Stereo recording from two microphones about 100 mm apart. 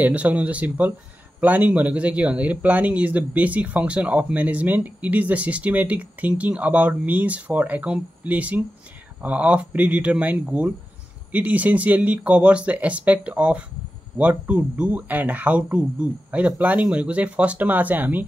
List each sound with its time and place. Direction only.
0.0 s speech: 15° right (ahead or behind)